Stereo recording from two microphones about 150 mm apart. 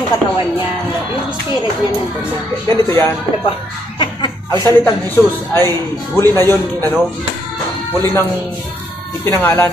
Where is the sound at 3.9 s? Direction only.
30° left (ahead or behind).